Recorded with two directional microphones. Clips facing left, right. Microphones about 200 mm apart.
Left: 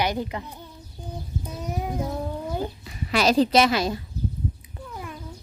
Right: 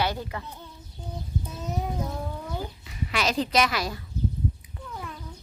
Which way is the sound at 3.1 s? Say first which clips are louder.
Left 6 dB; 35° left (ahead or behind).